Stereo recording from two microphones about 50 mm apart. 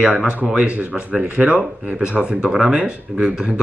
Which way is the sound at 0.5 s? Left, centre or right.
Right.